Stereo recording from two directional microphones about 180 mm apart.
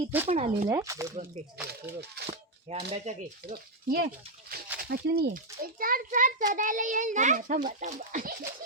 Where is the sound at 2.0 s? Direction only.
65° right (ahead or behind).